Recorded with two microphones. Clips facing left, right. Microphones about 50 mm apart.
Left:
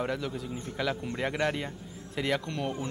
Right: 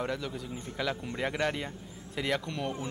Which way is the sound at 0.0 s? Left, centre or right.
Centre.